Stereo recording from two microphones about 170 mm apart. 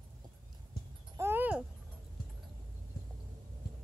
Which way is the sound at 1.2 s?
10° right (ahead or behind).